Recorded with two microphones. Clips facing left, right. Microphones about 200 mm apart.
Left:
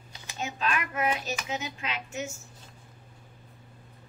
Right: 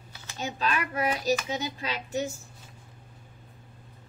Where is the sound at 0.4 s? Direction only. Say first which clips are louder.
Right 1 dB; 35° right (ahead or behind).